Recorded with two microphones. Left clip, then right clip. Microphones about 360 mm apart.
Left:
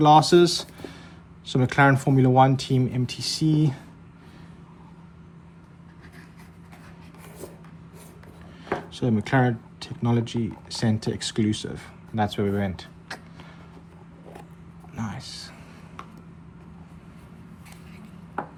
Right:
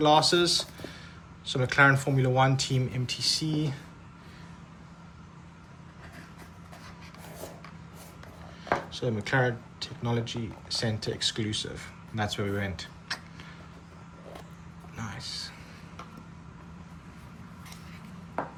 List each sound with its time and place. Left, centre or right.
0.0 s speech: centre
8.6 s speech: centre
14.9 s a sound: centre